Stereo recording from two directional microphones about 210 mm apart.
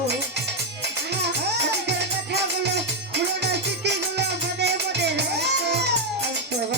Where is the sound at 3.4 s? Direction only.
55° right (ahead or behind).